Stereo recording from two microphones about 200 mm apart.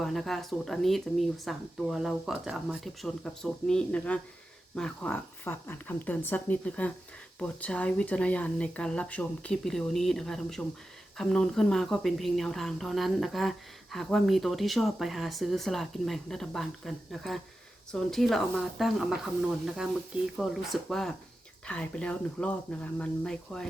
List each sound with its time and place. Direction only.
0.0 s a woman's voice: centre (ahead or behind)